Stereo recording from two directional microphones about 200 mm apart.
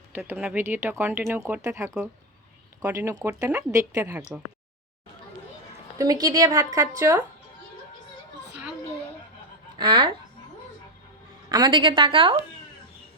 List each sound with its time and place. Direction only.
0.1 s speech: 5° right (ahead or behind)
6.0 s speech: 20° right (ahead or behind)
9.7 s speech: 20° right (ahead or behind)
11.4 s a woman's voice: 20° right (ahead or behind)